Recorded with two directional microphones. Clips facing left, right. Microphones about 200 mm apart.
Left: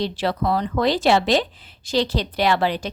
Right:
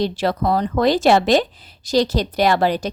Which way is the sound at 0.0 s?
45° right (ahead or behind).